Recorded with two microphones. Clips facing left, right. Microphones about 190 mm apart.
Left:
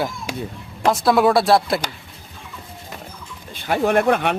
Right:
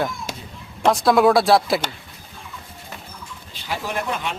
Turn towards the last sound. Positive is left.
turn(degrees=60)  # may be behind; listen again after turning